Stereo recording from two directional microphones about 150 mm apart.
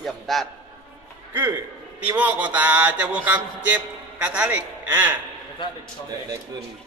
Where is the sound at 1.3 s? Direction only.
15° right (ahead or behind).